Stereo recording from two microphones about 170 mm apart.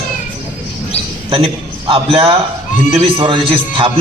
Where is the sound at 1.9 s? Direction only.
35° right (ahead or behind).